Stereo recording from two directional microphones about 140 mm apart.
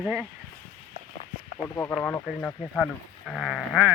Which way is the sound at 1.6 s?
15° left (ahead or behind).